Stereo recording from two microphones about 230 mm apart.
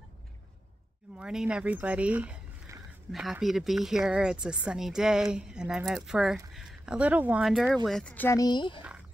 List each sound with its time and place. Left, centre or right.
1.1 s speech: centre